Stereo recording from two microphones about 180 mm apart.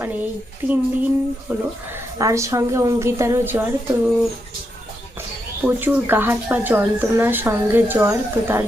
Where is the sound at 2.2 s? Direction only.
15° right (ahead or behind).